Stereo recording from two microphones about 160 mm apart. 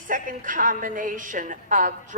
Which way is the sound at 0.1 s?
55° right (ahead or behind).